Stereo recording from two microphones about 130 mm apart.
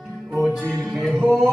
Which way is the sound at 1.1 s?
10° right (ahead or behind).